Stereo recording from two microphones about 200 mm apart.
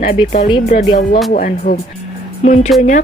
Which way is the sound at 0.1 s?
25° left (ahead or behind).